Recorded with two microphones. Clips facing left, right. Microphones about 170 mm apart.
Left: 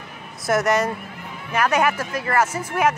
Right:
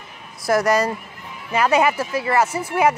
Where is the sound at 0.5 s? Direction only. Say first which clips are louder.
Right 2 dB; centre (ahead or behind).